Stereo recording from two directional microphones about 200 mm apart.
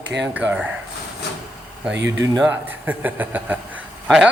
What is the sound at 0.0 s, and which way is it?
Speech, 60° right (ahead or behind).